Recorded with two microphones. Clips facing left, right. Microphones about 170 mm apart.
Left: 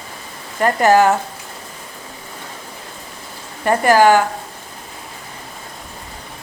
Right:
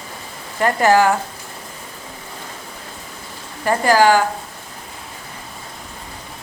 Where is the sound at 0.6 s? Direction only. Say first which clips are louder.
Left 1 dB; 20° left (ahead or behind).